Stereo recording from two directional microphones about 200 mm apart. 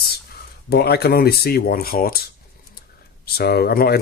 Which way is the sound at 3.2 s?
50° left (ahead or behind).